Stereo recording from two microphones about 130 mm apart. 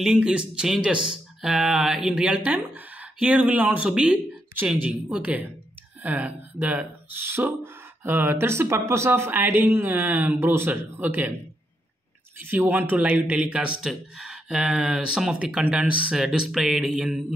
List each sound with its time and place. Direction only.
0.0 s speech: 5° right (ahead or behind)
12.4 s speech: 15° right (ahead or behind)